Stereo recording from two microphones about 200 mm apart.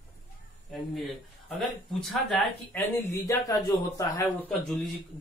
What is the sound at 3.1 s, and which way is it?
Speech, 15° left (ahead or behind).